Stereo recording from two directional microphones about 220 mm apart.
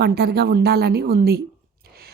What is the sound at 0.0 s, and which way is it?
A woman's voice, 45° right (ahead or behind).